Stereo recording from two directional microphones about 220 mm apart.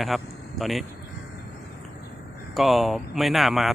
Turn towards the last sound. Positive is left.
turn(degrees=0)  # may be behind; listen again after turning